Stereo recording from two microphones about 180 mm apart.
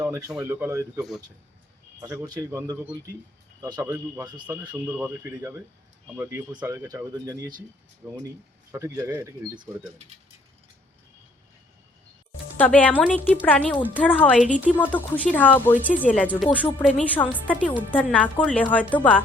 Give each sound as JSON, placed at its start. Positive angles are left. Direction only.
{"t": 0.0, "sound": "a sound", "side_deg": -15}
{"t": 0.3, "sound": "speech", "side_deg": -10}
{"t": 4.9, "sound": "speech", "side_deg": -10}
{"t": 12.5, "sound": "a woman's voice", "side_deg": 10}